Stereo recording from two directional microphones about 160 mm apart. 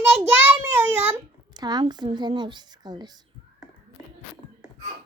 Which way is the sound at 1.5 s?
25° right (ahead or behind).